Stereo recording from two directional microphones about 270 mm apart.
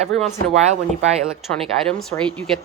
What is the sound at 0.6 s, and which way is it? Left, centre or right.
Speech, right.